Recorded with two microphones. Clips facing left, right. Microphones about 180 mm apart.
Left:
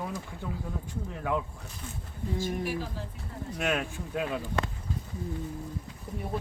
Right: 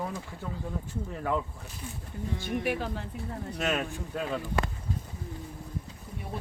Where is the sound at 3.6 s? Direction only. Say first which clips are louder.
Even; centre (ahead or behind).